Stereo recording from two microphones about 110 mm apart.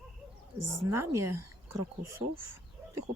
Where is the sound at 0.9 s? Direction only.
25° right (ahead or behind).